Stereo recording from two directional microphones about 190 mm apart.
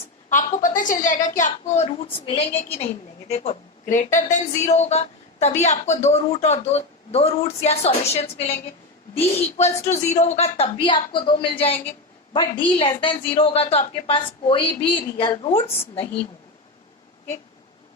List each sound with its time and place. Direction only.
0.3 s a woman's voice: 40° left (ahead or behind)